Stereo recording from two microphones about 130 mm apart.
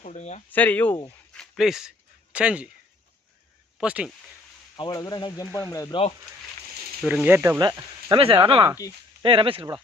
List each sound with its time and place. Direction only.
0.0 s speech: 65° left (ahead or behind)
0.5 s speech: 10° left (ahead or behind); by 2.6 s 10° right (ahead or behind)
3.8 s speech: 5° right (ahead or behind)
4.9 s speech: 30° left (ahead or behind)
5.9 s speech: 45° left (ahead or behind)
7.0 s speech: 15° right (ahead or behind)
7.6 s speech: 25° right (ahead or behind)
8.1 s speech: 40° right (ahead or behind)